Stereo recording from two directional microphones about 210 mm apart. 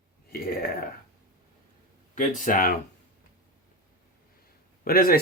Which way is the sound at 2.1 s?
40° left (ahead or behind).